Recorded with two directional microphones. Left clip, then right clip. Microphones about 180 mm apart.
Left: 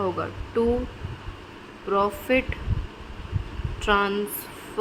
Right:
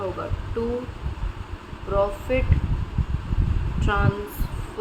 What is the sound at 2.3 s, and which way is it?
Speech, 30° left (ahead or behind).